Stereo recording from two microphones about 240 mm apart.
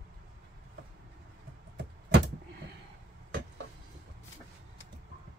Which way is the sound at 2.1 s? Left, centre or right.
Right.